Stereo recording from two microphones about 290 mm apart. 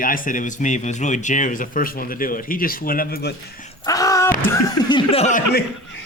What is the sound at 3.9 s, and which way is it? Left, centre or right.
Speech, centre.